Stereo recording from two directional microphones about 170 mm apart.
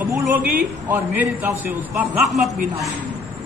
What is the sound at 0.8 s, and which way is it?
A man's voice, 10° right (ahead or behind).